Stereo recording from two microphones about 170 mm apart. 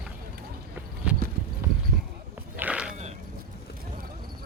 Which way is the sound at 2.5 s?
5° right (ahead or behind).